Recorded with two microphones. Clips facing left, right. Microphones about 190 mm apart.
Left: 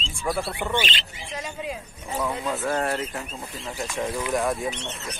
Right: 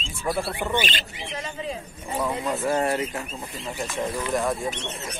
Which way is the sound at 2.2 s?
5° right (ahead or behind).